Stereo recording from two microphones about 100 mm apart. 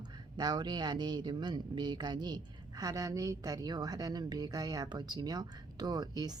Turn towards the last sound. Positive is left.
turn(degrees=-40)  # may be behind; listen again after turning